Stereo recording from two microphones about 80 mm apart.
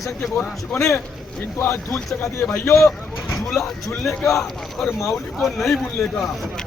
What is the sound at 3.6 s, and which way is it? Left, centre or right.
Speech, centre.